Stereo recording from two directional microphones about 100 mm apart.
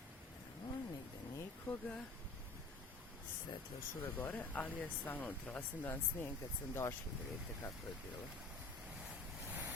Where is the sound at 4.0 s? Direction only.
20° left (ahead or behind).